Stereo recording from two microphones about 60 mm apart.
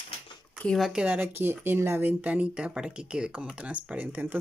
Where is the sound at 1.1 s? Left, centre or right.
Right.